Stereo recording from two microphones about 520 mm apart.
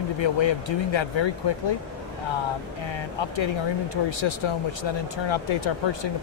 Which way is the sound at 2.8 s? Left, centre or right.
Left.